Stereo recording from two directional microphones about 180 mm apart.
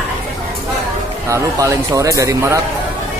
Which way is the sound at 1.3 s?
15° right (ahead or behind).